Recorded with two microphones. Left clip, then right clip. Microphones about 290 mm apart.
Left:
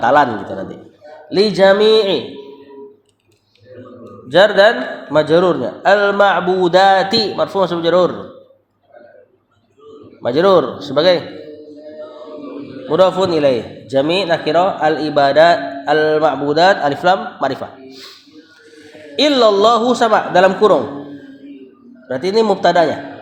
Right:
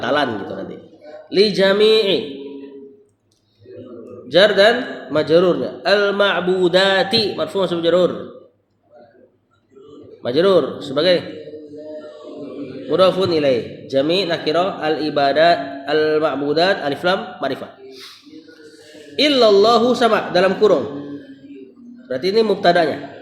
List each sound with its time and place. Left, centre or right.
0.0 s a man's voice: left
1.3 s a man's voice: left
4.3 s a man's voice: left
10.2 s a man's voice: left
12.9 s a man's voice: left
19.1 s a man's voice: left
22.1 s a man's voice: left